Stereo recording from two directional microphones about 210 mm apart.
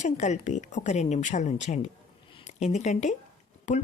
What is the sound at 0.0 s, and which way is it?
A woman's voice, 35° left (ahead or behind).